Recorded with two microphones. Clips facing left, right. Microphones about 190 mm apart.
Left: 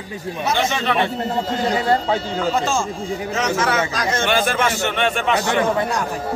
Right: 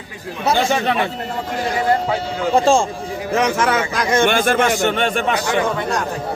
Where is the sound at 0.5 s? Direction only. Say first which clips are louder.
Right 4 dB; 35° right (ahead or behind).